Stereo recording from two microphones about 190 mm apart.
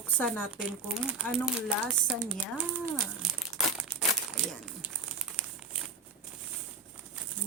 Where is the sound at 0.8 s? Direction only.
5° right (ahead or behind).